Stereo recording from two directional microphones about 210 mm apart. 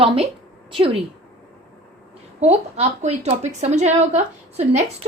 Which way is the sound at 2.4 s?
30° right (ahead or behind).